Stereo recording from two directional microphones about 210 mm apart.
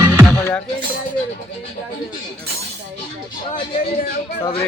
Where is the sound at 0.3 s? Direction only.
10° left (ahead or behind).